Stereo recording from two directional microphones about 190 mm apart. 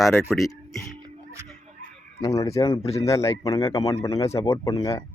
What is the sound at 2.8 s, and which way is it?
Speech, 35° left (ahead or behind).